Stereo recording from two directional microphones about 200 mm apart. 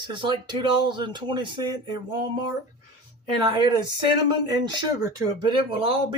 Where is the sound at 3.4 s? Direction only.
25° right (ahead or behind).